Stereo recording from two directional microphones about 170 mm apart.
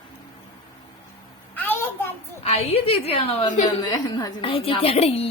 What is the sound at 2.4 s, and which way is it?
A woman's voice, 35° left (ahead or behind).